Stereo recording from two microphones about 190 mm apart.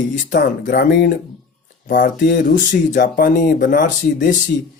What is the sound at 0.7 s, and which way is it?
Speech, 50° left (ahead or behind).